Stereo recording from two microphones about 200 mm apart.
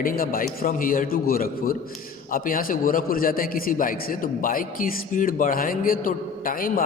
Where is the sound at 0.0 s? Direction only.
45° left (ahead or behind).